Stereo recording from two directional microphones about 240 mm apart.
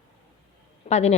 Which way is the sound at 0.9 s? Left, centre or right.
Left.